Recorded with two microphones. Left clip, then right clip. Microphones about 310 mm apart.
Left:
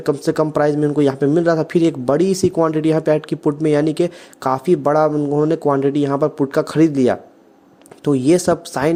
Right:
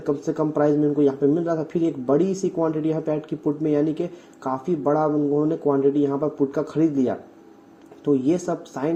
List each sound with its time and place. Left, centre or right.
0.0 s a man's voice: left